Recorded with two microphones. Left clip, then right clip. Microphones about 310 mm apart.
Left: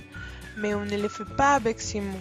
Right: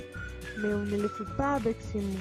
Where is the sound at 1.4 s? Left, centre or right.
Left.